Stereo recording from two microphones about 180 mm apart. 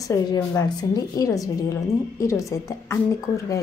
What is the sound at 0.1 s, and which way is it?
Speech, 20° left (ahead or behind).